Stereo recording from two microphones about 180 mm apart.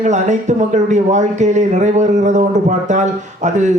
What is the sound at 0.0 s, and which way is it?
Speech, 40° right (ahead or behind).